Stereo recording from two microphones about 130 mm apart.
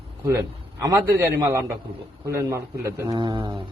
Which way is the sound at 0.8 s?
25° right (ahead or behind).